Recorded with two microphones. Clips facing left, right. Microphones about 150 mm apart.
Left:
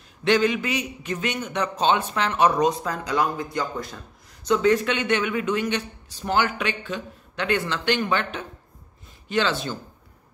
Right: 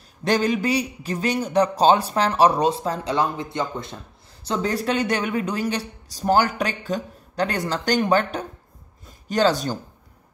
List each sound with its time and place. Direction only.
0.2 s a man's voice: 40° right (ahead or behind)